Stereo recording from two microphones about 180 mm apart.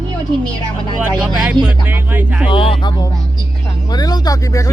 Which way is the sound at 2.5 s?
30° left (ahead or behind).